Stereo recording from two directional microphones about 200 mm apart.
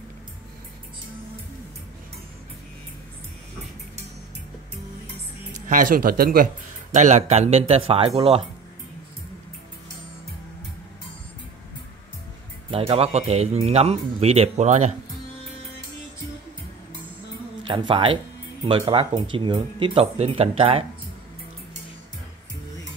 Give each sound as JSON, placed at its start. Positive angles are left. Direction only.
{"t": 5.7, "sound": "speech", "side_deg": -40}
{"t": 12.7, "sound": "speech", "side_deg": -30}
{"t": 17.6, "sound": "speech", "side_deg": -25}